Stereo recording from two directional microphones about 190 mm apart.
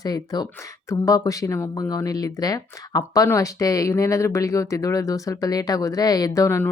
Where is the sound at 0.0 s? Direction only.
20° left (ahead or behind).